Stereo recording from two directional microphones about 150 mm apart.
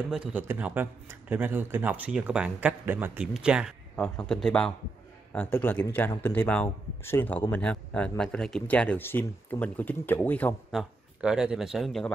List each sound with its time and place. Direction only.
0.1 s a man's voice: 10° right (ahead or behind)
3.9 s a man's voice: 5° left (ahead or behind)
10.7 s speech: 5° right (ahead or behind)